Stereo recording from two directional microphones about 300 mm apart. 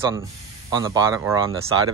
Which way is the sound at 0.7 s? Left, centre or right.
Centre.